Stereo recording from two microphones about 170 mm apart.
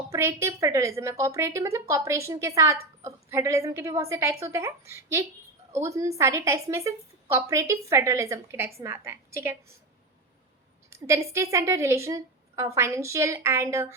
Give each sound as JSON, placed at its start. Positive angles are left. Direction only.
{"t": 0.1, "sound": "a woman's voice", "side_deg": -15}
{"t": 10.8, "sound": "a woman's voice", "side_deg": -15}